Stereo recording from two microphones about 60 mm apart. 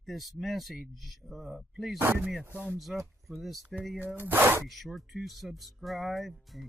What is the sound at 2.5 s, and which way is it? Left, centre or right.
Speech, centre.